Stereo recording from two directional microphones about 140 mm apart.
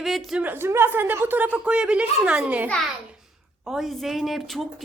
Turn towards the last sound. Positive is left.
turn(degrees=0)  # may be behind; listen again after turning